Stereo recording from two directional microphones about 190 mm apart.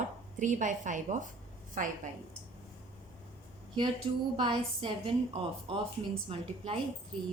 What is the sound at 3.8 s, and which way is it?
A woman's voice, 25° right (ahead or behind).